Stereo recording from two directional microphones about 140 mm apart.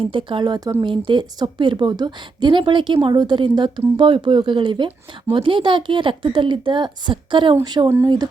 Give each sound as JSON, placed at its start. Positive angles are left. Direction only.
{"t": 0.0, "sound": "a woman's voice", "side_deg": -40}